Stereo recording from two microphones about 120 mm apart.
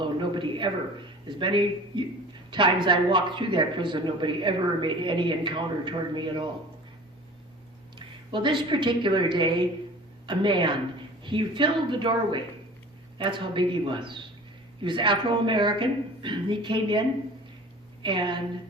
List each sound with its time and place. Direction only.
0.0 s a sound: 40° right (ahead or behind)
1.4 s a woman's voice: 40° right (ahead or behind)
7.9 s a woman's voice: 45° right (ahead or behind)
18.0 s speech: 40° right (ahead or behind)